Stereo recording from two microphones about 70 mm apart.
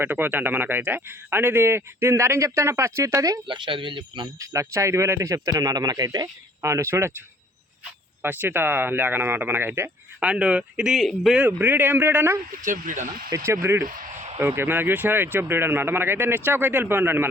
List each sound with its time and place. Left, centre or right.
0.0 s a man's voice: right
3.2 s speech: right
5.5 s speech: right
6.6 s a man's voice: right
8.2 s a man's voice: right
10.2 s speech: centre
11.3 s a man's voice: right